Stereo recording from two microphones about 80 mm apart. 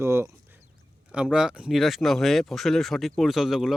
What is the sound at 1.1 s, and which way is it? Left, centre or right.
Speech, centre.